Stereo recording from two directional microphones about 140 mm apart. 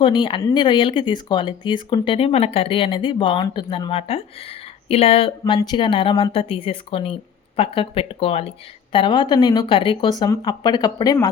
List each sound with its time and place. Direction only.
0.0 s speech: 35° left (ahead or behind)